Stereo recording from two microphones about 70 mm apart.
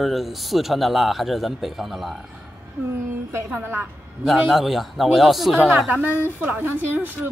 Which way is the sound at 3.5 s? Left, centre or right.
Right.